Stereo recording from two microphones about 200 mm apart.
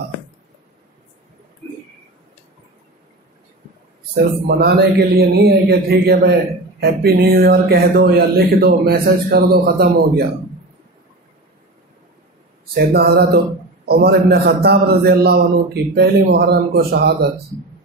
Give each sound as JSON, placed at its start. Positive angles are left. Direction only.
{"t": 4.1, "sound": "speech", "side_deg": -50}
{"t": 12.7, "sound": "speech", "side_deg": -50}